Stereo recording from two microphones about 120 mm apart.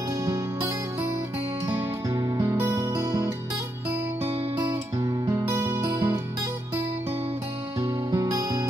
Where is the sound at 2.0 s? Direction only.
30° right (ahead or behind).